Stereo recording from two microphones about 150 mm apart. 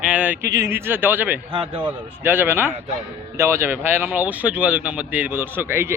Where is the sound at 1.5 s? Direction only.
35° right (ahead or behind).